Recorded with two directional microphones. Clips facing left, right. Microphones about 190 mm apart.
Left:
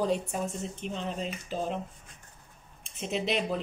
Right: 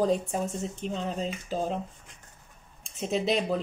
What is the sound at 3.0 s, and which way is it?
Speech, 40° right (ahead or behind).